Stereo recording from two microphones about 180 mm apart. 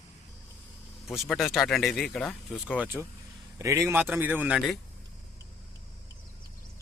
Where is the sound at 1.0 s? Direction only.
Centre (ahead or behind).